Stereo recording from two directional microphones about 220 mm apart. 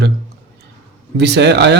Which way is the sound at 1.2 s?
50° right (ahead or behind).